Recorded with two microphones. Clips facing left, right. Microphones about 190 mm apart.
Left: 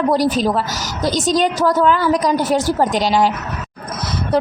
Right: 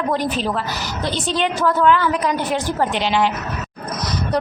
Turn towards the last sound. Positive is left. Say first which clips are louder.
# left 3 dB
turn(degrees=40)  # may be behind; listen again after turning